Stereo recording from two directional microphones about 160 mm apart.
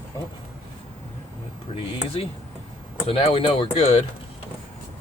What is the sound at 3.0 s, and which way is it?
Speech, 35° left (ahead or behind).